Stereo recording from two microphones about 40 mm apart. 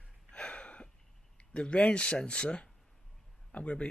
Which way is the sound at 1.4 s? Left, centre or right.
Left.